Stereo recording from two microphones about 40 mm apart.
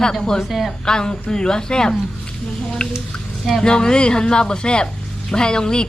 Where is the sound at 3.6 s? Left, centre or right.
Left.